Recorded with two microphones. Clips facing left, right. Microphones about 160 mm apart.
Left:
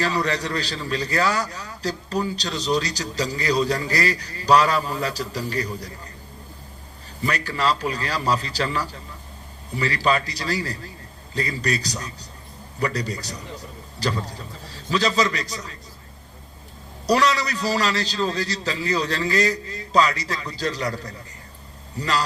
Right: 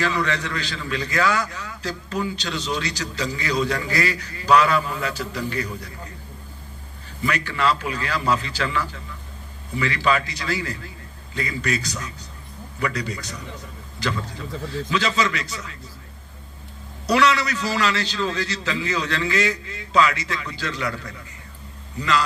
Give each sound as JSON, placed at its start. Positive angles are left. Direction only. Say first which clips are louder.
{"t": 0.0, "sound": "a man's voice", "louder": "even", "side_deg": 35}
{"t": 7.2, "sound": "a man's voice", "louder": "right 1 dB", "side_deg": 35}
{"t": 17.1, "sound": "a man's voice", "louder": "right 1 dB", "side_deg": 35}